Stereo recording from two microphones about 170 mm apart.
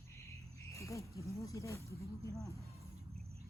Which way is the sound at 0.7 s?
20° left (ahead or behind).